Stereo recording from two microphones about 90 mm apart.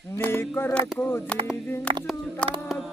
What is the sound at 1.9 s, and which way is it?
Speech, 90° right.